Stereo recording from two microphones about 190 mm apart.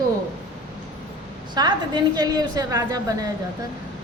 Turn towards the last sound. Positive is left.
turn(degrees=-20)  # may be behind; listen again after turning